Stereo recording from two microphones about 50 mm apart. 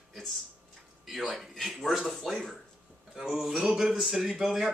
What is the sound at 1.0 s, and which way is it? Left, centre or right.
Speech, centre.